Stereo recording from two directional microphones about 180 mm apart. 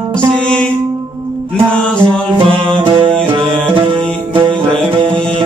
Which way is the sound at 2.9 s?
30° right (ahead or behind).